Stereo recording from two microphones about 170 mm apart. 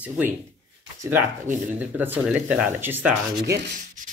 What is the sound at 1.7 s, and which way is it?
Speech, 10° right (ahead or behind).